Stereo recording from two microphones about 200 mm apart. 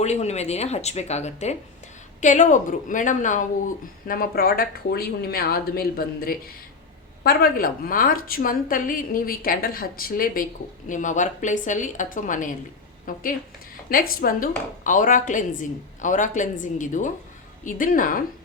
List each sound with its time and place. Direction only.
0.0 s speech: 35° left (ahead or behind)